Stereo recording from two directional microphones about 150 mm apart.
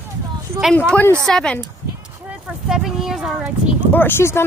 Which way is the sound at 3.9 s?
15° left (ahead or behind).